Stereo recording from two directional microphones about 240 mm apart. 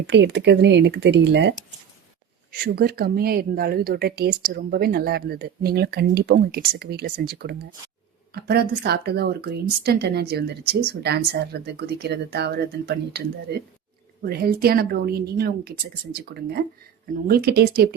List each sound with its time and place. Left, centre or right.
0.1 s speech: right